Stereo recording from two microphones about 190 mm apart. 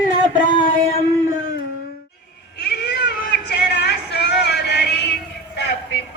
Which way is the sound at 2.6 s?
60° left (ahead or behind).